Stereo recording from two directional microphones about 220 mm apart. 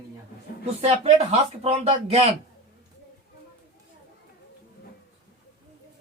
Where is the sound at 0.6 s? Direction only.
30° right (ahead or behind).